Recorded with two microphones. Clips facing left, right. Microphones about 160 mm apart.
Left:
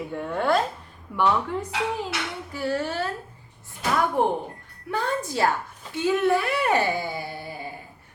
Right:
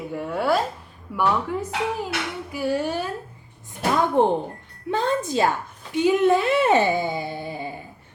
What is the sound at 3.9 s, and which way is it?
Speech, 25° right (ahead or behind).